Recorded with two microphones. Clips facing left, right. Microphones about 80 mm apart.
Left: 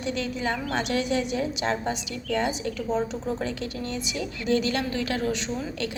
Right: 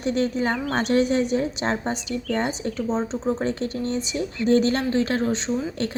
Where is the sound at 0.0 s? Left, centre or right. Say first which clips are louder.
Right 6 dB; right.